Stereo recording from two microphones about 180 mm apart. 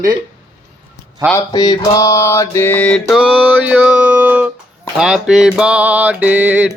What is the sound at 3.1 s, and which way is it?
Music, 5° right (ahead or behind).